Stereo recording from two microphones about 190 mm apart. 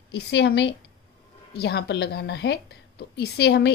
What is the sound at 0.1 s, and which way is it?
A woman's voice, 65° left (ahead or behind).